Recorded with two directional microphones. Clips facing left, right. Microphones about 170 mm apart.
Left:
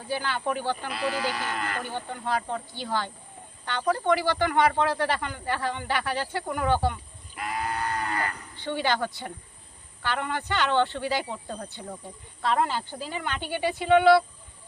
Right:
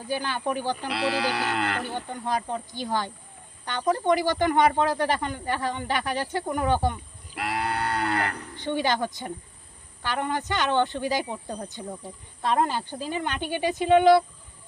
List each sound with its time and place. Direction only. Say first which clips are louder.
0.1 s speech: right 1 dB; 15° right (ahead or behind)
0.9 s speech: right 3 dB; 75° right (ahead or behind)
1.8 s speech: right 1 dB; 15° right (ahead or behind)
7.3 s livestock: right 2 dB; 75° right (ahead or behind)
8.5 s speech: right 1 dB; 15° right (ahead or behind)